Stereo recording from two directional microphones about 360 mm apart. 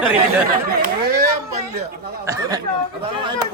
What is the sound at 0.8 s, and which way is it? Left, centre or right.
Speech, right.